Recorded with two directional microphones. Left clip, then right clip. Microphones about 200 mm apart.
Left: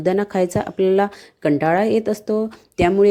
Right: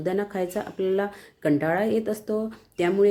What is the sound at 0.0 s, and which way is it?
Speech, 40° left (ahead or behind).